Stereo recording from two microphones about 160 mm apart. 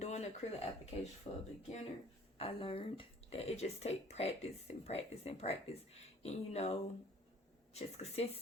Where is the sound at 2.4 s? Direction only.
35° left (ahead or behind).